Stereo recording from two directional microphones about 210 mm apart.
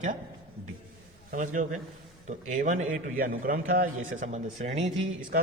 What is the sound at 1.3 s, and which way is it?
A man's voice, 40° right (ahead or behind).